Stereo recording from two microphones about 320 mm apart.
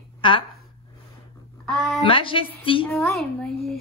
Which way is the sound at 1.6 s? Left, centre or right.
Centre.